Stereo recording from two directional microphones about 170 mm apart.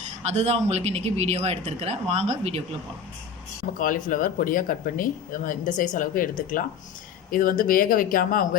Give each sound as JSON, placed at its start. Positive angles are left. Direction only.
{"t": 0.2, "sound": "speech", "side_deg": -40}
{"t": 3.8, "sound": "speech", "side_deg": 55}